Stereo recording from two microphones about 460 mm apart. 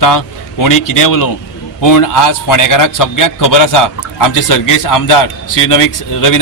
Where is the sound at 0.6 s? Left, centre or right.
Left.